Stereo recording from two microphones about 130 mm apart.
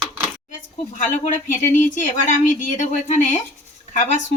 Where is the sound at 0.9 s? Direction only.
70° left (ahead or behind).